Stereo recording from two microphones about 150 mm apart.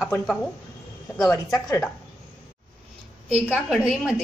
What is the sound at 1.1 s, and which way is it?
Speech, 20° left (ahead or behind).